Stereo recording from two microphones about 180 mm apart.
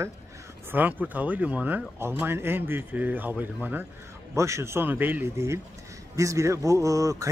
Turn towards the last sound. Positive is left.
turn(degrees=-20)  # may be behind; listen again after turning